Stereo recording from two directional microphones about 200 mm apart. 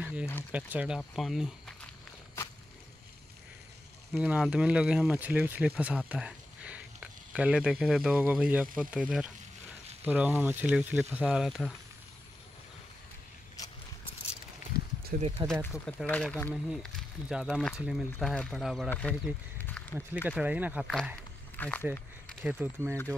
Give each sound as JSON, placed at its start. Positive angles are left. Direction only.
{"t": 0.0, "sound": "a sound", "side_deg": -5}
{"t": 0.5, "sound": "speech", "side_deg": -5}
{"t": 4.1, "sound": "speech", "side_deg": -5}
{"t": 15.1, "sound": "speech", "side_deg": -45}
{"t": 15.7, "sound": "speech", "side_deg": 0}
{"t": 19.6, "sound": "a sound", "side_deg": 10}
{"t": 20.2, "sound": "speech", "side_deg": -5}
{"t": 21.5, "sound": "speech", "side_deg": 10}
{"t": 22.3, "sound": "speech", "side_deg": -5}